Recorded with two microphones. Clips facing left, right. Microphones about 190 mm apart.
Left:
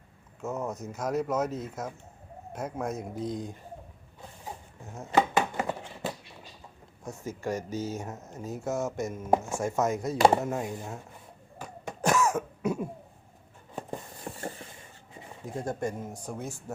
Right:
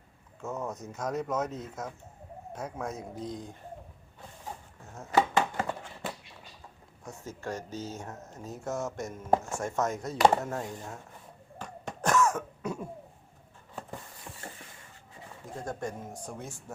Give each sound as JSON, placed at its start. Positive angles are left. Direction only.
{"t": 0.4, "sound": "speech", "side_deg": 5}
{"t": 4.9, "sound": "chopping", "side_deg": 15}
{"t": 7.0, "sound": "speech", "side_deg": 10}
{"t": 11.6, "sound": "cough", "side_deg": 10}
{"t": 14.3, "sound": "a sound", "side_deg": 50}
{"t": 15.1, "sound": "a sound", "side_deg": 20}
{"t": 15.6, "sound": "speech", "side_deg": 5}